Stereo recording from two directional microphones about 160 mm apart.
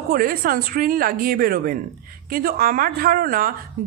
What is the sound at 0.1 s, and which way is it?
A woman's voice, 65° right (ahead or behind).